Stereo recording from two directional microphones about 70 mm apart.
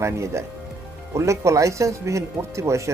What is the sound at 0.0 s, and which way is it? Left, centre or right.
Speech, right.